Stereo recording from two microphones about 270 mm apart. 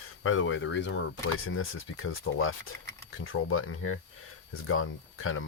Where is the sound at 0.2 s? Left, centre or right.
Left.